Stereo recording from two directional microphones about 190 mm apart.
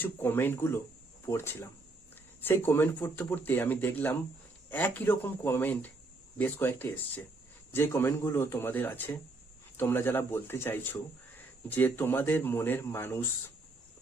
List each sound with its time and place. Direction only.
0.0 s speech: 10° left (ahead or behind)